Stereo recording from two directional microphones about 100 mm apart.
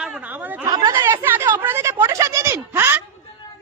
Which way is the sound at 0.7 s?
45° right (ahead or behind).